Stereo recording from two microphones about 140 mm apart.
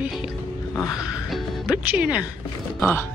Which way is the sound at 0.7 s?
25° left (ahead or behind).